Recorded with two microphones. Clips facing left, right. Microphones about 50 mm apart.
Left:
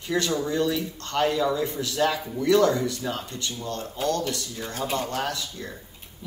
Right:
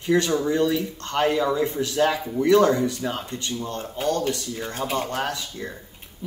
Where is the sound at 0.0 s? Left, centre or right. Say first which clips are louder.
Right 5 dB; right.